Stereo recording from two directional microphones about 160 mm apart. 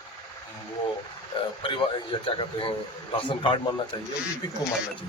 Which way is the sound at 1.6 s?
30° left (ahead or behind).